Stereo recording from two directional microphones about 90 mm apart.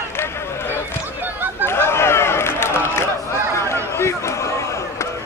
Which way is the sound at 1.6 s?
25° left (ahead or behind).